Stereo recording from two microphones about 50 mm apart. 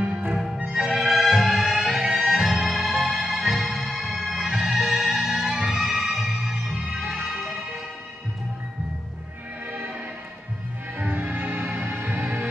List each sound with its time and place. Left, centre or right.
0.3 s music: centre
9.7 s music: right
11.0 s music: right